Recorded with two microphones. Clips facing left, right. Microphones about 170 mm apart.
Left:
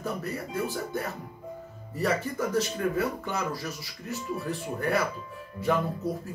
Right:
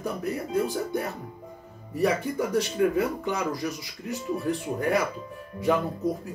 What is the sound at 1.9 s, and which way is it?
Speech, 15° right (ahead or behind).